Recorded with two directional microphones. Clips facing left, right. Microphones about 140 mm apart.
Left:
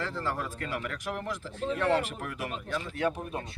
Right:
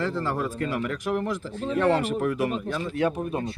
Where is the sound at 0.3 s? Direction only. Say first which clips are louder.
Right 6 dB; 25° right (ahead or behind).